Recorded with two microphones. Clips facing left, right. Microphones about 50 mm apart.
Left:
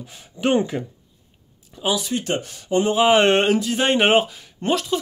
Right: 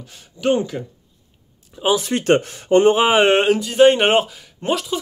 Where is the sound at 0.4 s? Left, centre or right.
Left.